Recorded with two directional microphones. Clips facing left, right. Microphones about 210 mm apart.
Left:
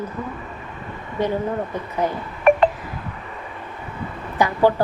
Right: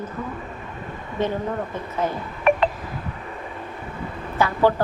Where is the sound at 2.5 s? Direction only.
50° left (ahead or behind).